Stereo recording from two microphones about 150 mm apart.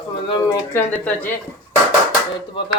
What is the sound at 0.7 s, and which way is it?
Speech, 10° left (ahead or behind).